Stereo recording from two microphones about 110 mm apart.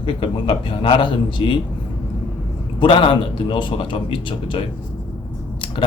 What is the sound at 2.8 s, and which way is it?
Speech, 50° left (ahead or behind).